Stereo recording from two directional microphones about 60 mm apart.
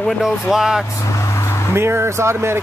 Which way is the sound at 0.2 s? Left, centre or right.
Centre.